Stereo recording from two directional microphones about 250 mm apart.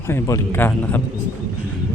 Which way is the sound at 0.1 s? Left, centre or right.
Centre.